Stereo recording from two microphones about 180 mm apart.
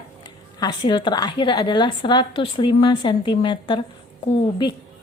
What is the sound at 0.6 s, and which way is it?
Speech, 25° left (ahead or behind).